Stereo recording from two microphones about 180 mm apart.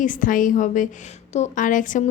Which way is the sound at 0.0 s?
45° left (ahead or behind).